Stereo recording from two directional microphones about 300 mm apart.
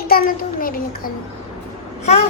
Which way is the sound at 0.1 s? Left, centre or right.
Left.